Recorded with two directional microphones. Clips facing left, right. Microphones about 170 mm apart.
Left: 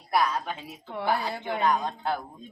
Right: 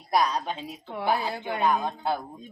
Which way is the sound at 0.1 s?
15° right (ahead or behind).